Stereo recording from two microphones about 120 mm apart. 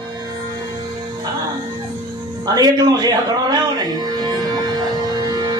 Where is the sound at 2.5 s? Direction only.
30° right (ahead or behind).